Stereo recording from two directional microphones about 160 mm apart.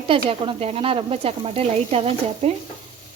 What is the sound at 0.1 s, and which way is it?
Speech, 35° right (ahead or behind).